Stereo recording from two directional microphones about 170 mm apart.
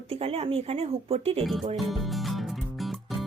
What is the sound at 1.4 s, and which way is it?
Speech, centre (ahead or behind).